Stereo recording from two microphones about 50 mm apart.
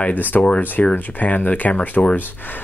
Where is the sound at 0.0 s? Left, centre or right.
Left.